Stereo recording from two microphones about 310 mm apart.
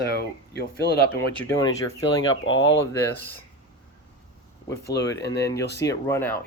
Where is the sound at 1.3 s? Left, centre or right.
Centre.